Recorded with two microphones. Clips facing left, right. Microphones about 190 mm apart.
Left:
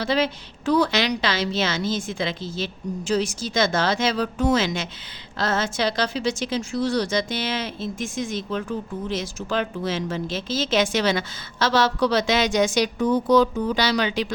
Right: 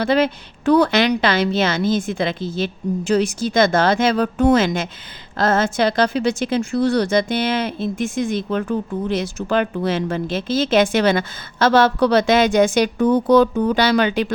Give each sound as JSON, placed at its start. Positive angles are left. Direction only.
{"t": 0.0, "sound": "a woman's voice", "side_deg": -55}